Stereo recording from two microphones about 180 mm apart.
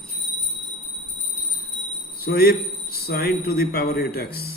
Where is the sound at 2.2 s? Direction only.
60° left (ahead or behind).